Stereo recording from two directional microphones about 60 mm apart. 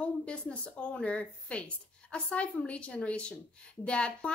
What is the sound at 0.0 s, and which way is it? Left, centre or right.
A woman's voice, centre.